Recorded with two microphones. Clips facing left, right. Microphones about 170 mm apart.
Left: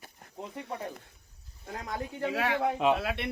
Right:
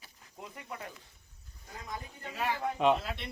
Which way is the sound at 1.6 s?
70° left (ahead or behind).